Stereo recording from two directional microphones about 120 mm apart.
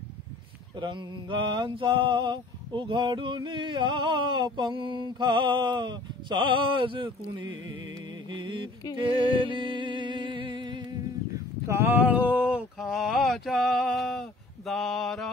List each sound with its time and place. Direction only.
0.7 s mantra: 40° right (ahead or behind)
8.3 s music: 40° right (ahead or behind)
10.9 s a sound: 25° right (ahead or behind); by 14.2 s 5° left (ahead or behind)
14.7 s mantra: 5° left (ahead or behind)